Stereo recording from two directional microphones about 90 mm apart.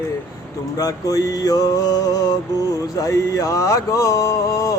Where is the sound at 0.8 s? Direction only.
40° left (ahead or behind).